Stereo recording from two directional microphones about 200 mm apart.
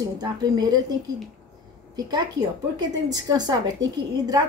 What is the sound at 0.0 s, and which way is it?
Speech, 20° right (ahead or behind).